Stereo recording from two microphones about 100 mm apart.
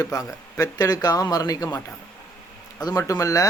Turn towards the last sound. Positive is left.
turn(degrees=35)  # may be behind; listen again after turning